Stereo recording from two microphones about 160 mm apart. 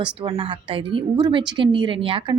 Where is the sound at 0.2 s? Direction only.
35° right (ahead or behind).